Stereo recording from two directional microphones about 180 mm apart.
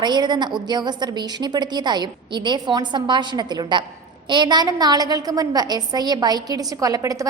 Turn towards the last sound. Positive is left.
turn(degrees=-20)  # may be behind; listen again after turning